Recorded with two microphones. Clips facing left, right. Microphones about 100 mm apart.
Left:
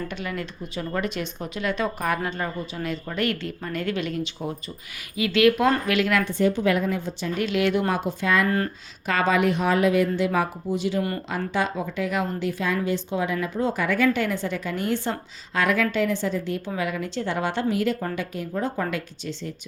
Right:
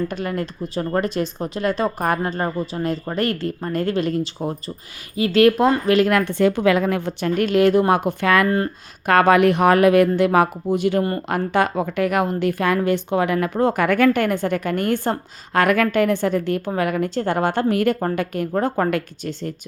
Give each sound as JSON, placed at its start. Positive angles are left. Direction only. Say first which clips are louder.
{"t": 0.1, "sound": "a woman's voice", "louder": "right 6 dB", "side_deg": -40}
{"t": 7.9, "sound": "a woman's voice", "louder": "right 6 dB", "side_deg": -55}
{"t": 8.4, "sound": "speech", "louder": "right 4 dB", "side_deg": -25}
{"t": 9.0, "sound": "a woman's voice", "louder": "right 7 dB", "side_deg": -60}